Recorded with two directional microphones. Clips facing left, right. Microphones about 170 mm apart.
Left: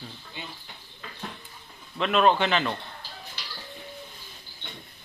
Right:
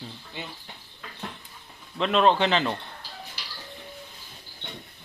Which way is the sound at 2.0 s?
30° right (ahead or behind).